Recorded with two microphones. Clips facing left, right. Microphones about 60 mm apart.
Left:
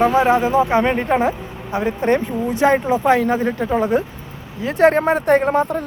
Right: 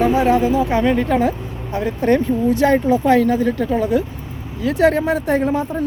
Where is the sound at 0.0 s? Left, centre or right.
Left.